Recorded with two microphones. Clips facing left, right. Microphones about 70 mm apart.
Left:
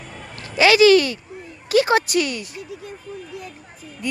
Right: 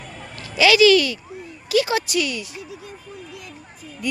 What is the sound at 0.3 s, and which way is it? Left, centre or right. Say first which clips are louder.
Speech: left 1 dB; left.